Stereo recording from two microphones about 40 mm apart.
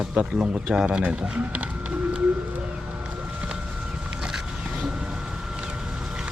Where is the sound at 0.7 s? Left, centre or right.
Centre.